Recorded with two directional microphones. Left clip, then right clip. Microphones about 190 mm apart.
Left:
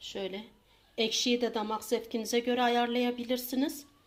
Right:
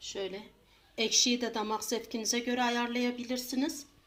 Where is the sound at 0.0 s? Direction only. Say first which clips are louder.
Even; 25° left (ahead or behind).